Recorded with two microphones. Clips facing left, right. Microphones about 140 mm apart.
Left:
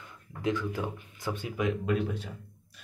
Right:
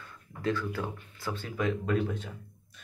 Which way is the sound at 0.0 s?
15° left (ahead or behind).